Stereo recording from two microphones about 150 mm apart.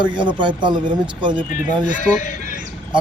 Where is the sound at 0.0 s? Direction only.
30° right (ahead or behind).